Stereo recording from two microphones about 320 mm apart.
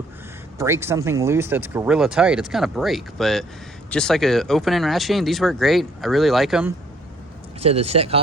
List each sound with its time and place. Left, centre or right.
0.6 s speech: centre
7.6 s speech: centre